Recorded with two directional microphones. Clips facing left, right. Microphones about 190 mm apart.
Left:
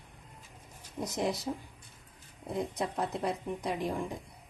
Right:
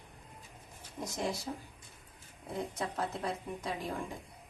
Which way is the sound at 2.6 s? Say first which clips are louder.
Left 3 dB; 15° left (ahead or behind).